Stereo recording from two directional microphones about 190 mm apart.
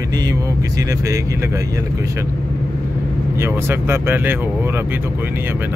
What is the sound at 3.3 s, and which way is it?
Speech, 15° right (ahead or behind).